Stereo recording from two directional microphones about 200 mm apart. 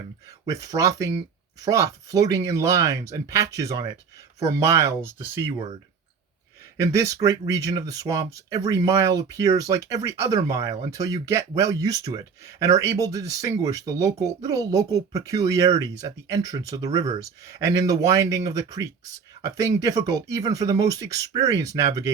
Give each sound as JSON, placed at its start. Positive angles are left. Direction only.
{"t": 0.4, "sound": "speech", "side_deg": -15}
{"t": 6.9, "sound": "speech", "side_deg": -15}